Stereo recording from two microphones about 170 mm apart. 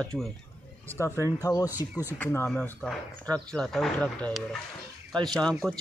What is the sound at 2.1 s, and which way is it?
Speech, 10° left (ahead or behind).